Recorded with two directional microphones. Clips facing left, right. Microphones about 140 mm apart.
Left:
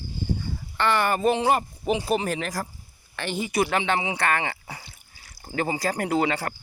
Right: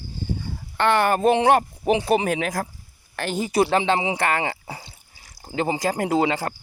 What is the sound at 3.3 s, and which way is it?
Speech, 35° right (ahead or behind).